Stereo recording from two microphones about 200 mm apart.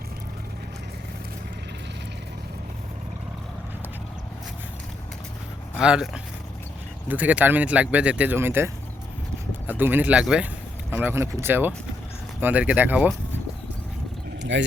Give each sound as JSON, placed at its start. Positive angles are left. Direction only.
{"t": 5.7, "sound": "speech", "side_deg": -5}
{"t": 7.1, "sound": "speech", "side_deg": -5}
{"t": 14.5, "sound": "speech", "side_deg": -65}